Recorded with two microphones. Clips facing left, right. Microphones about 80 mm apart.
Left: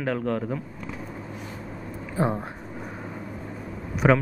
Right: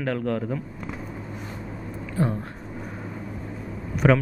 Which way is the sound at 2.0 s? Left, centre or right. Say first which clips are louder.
Left 1 dB; centre.